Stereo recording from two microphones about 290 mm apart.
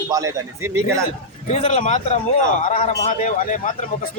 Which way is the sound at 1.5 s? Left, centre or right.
Left.